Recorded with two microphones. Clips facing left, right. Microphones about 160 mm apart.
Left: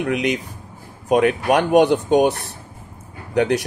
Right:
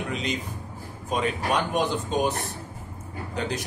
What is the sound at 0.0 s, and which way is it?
A man's voice, 70° left (ahead or behind).